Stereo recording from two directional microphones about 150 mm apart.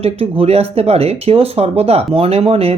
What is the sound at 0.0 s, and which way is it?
Speech, 40° right (ahead or behind).